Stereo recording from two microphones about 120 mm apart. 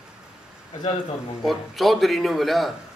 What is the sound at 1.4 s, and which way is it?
Speech, centre (ahead or behind).